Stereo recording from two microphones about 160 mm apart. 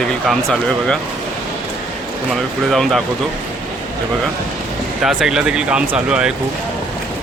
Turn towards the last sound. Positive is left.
turn(degrees=-5)  # may be behind; listen again after turning